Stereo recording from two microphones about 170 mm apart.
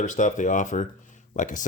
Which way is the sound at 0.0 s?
45° left (ahead or behind).